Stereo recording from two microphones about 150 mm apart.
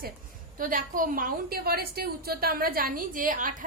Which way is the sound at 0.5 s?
65° right (ahead or behind).